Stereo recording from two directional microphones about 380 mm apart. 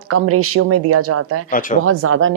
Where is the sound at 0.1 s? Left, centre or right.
Right.